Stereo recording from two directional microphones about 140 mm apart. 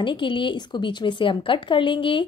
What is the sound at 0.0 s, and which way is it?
A woman's voice, 35° left (ahead or behind).